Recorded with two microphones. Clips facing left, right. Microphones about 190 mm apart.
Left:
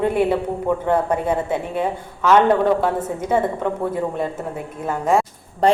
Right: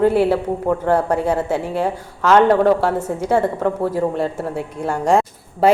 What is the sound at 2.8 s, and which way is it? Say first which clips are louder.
Speech: right 2 dB; 10° right (ahead or behind).